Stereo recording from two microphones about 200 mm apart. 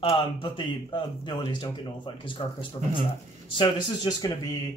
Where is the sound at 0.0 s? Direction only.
25° left (ahead or behind).